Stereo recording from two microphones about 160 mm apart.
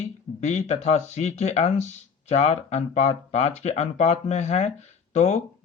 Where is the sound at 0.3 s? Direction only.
45° left (ahead or behind).